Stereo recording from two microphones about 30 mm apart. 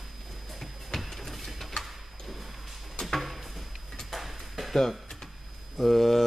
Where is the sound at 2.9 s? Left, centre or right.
Centre.